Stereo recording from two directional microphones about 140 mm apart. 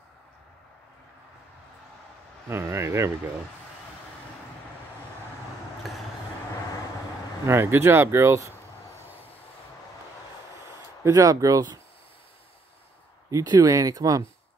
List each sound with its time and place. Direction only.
2.4 s speech: 20° right (ahead or behind)
7.4 s speech: 15° right (ahead or behind)
11.1 s speech: 25° right (ahead or behind)
13.3 s speech: 25° right (ahead or behind)